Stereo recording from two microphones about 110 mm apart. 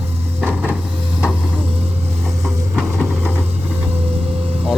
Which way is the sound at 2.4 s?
5° left (ahead or behind).